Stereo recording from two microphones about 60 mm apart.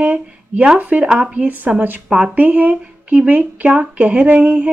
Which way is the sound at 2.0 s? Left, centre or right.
Centre.